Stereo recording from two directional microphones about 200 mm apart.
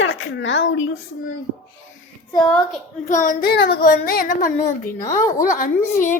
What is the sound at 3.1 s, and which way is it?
A woman's voice, 40° left (ahead or behind).